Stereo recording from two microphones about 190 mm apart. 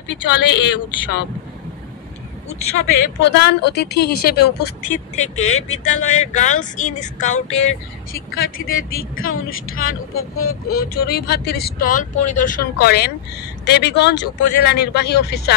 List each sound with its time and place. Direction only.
0.1 s a woman's voice: 70° left (ahead or behind)
2.7 s a woman's voice: 65° left (ahead or behind)
5.1 s a sound: 35° left (ahead or behind)
5.5 s speech: 90° left
6.0 s a sound: 40° left (ahead or behind)
8.6 s speech: 50° left (ahead or behind)
9.1 s speech: 90° left
10.7 s a woman's voice: 50° left (ahead or behind)